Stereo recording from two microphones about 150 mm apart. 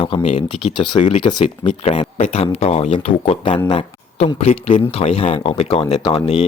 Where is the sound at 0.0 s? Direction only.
40° left (ahead or behind).